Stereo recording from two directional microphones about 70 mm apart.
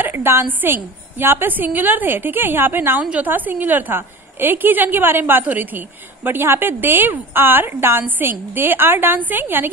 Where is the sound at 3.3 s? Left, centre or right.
Right.